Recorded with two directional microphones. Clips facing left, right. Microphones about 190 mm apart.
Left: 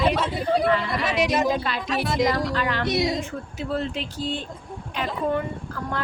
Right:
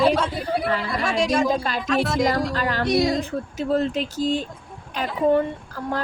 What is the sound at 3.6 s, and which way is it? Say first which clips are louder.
Speech: right 5 dB; 40° right (ahead or behind).